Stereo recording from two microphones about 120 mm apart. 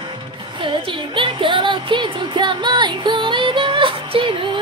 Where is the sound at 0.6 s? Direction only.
45° right (ahead or behind).